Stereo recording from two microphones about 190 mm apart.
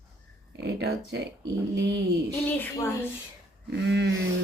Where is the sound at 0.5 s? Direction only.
60° right (ahead or behind).